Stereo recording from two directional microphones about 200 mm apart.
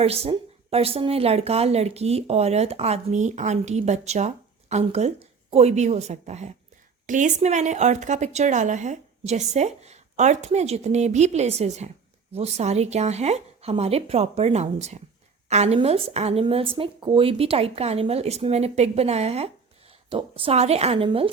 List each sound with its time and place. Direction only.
0.0 s a woman's voice: 30° right (ahead or behind)